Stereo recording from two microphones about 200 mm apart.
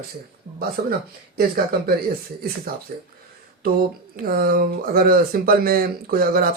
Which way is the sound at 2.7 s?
45° right (ahead or behind).